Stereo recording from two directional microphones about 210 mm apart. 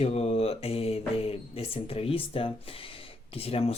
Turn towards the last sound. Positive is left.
turn(degrees=30)  # may be behind; listen again after turning